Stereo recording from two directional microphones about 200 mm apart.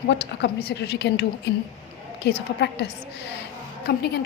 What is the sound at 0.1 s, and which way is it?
A woman's voice, 55° left (ahead or behind).